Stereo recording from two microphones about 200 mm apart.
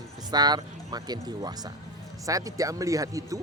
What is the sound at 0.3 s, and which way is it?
Speech, 20° right (ahead or behind).